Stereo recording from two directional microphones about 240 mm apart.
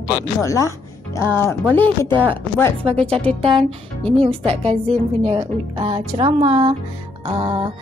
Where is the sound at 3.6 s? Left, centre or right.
Right.